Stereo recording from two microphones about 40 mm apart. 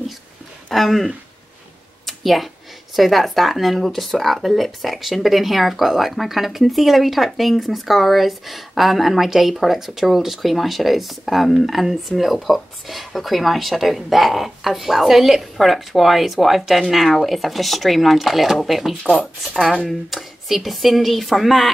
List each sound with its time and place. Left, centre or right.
0.7 s speech: centre
2.0 s a sound: centre
3.0 s speech: centre